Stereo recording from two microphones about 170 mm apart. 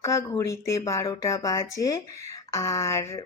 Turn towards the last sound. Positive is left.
turn(degrees=15)  # may be behind; listen again after turning